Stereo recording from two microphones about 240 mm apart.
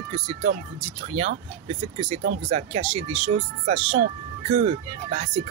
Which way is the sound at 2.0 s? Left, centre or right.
Right.